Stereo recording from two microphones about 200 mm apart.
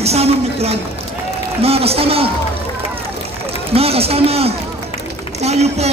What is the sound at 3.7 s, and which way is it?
A man's voice, 30° right (ahead or behind).